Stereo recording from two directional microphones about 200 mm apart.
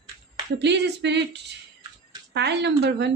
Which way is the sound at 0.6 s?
60° right (ahead or behind).